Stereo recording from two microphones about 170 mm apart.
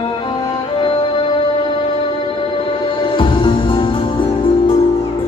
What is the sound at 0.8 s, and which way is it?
Music, 30° left (ahead or behind).